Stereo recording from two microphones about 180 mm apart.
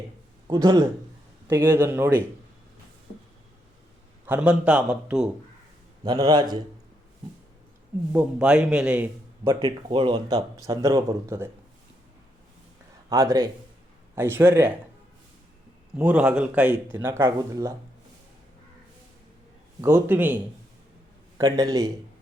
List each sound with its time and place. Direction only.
0.4 s a man's voice: 20° right (ahead or behind)
4.3 s a man's voice: 5° right (ahead or behind)
6.1 s a man's voice: 20° right (ahead or behind)
8.1 s a man's voice: 5° right (ahead or behind)
13.1 s a man's voice: 20° right (ahead or behind)
16.0 s a man's voice: 10° right (ahead or behind)
19.8 s a man's voice: 10° right (ahead or behind)